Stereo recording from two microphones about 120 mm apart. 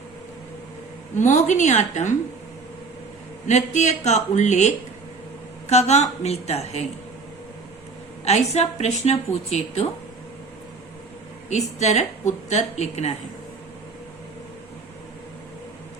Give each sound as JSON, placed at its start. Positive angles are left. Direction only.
{"t": 1.1, "sound": "a woman's voice", "side_deg": 90}
{"t": 3.4, "sound": "a man's voice", "side_deg": 75}
{"t": 8.2, "sound": "a woman's voice", "side_deg": 65}
{"t": 11.4, "sound": "a man's voice", "side_deg": 70}